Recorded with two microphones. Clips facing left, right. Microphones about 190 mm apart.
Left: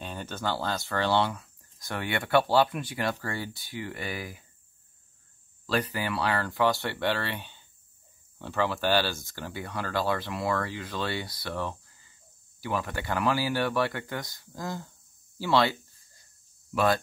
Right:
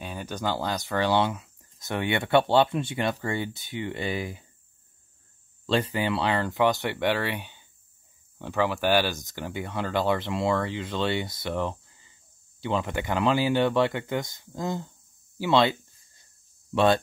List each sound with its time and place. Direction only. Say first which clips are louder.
0.0 s speech: right 2 dB; 10° right (ahead or behind)
5.7 s speech: right 4 dB; 25° right (ahead or behind)
15.3 s a sound: right 3 dB; 20° right (ahead or behind)
16.7 s speech: right 4 dB; 25° right (ahead or behind)